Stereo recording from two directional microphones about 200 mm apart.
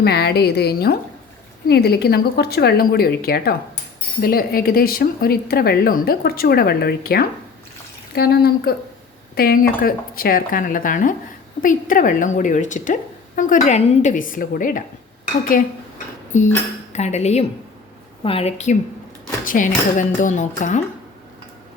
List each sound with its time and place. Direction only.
0.0 s a woman's voice: 55° left (ahead or behind)
16.3 s a woman's voice: 40° left (ahead or behind)